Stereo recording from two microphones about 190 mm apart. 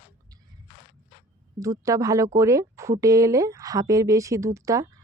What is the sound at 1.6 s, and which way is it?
A woman's voice, 15° right (ahead or behind).